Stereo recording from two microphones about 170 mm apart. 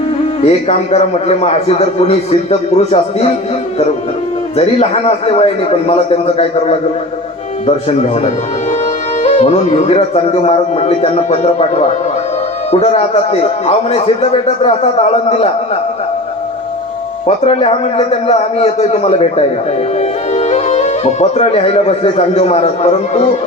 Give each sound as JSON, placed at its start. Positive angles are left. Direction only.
{"t": 0.4, "sound": "a man's voice", "side_deg": 40}
{"t": 4.5, "sound": "a man's voice", "side_deg": 35}
{"t": 7.9, "sound": "a man's voice", "side_deg": 40}
{"t": 17.2, "sound": "a man's voice", "side_deg": 35}